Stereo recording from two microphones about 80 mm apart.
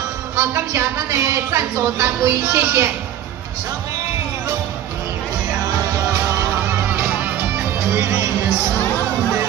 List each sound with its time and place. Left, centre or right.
0.4 s a woman's voice: right
6.1 s music: right